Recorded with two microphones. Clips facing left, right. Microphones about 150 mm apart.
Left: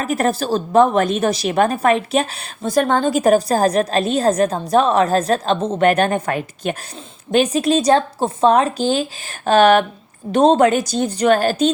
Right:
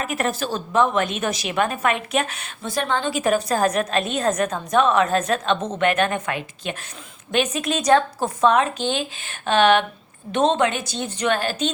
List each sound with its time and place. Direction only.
0.0 s a woman's voice: 35° left (ahead or behind)